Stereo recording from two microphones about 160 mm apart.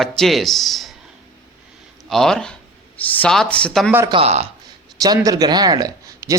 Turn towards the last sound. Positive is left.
turn(degrees=-20)  # may be behind; listen again after turning